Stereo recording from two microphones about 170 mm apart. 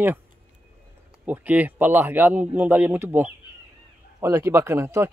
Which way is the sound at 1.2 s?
10° right (ahead or behind).